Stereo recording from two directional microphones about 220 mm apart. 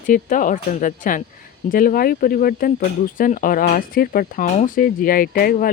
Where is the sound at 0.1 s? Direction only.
35° left (ahead or behind).